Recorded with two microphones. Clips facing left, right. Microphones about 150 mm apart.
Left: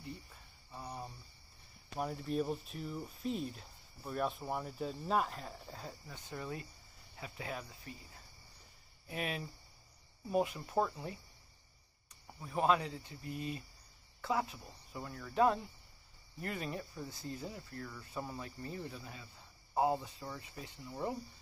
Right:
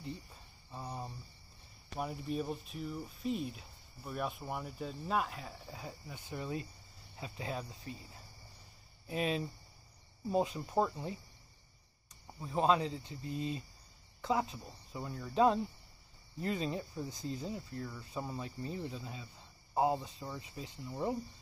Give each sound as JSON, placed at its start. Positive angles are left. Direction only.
{"t": 0.7, "sound": "speech", "side_deg": -25}
{"t": 2.0, "sound": "speech", "side_deg": 0}
{"t": 12.4, "sound": "speech", "side_deg": -25}